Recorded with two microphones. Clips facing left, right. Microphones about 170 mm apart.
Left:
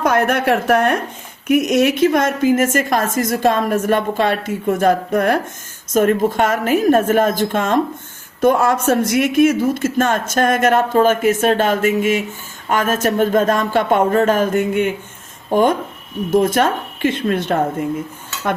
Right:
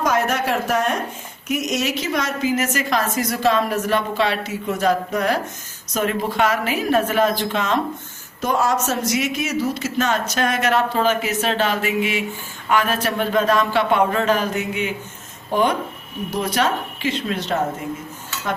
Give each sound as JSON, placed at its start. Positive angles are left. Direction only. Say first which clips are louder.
{"t": 0.0, "sound": "a woman's voice", "louder": "left 4 dB", "side_deg": 60}